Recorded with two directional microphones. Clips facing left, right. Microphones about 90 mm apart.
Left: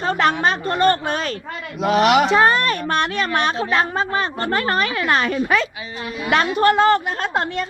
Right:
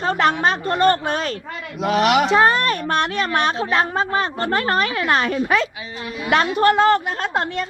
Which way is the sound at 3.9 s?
35° right (ahead or behind).